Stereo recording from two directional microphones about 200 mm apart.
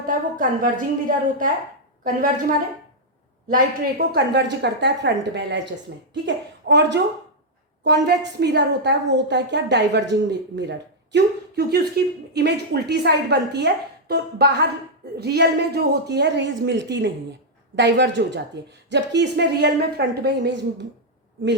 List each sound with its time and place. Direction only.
0.0 s a woman's voice: 45° right (ahead or behind)
3.5 s a woman's voice: 50° right (ahead or behind)